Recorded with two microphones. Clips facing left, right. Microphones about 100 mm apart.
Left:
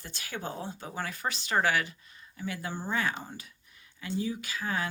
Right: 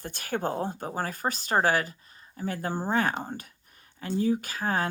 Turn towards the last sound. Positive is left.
turn(degrees=-45)  # may be behind; listen again after turning